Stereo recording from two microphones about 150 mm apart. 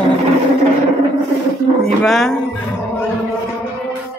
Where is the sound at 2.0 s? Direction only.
Centre (ahead or behind).